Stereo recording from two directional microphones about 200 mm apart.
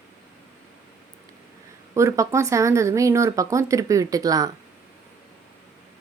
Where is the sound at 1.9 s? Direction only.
15° right (ahead or behind).